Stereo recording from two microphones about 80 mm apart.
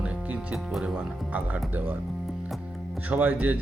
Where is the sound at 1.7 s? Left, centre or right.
Right.